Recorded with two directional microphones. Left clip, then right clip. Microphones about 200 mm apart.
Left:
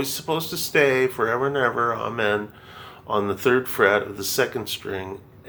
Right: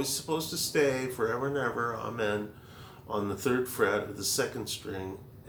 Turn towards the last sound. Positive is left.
turn(degrees=25)  # may be behind; listen again after turning